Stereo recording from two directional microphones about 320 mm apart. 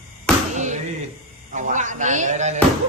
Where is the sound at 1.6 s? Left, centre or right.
Right.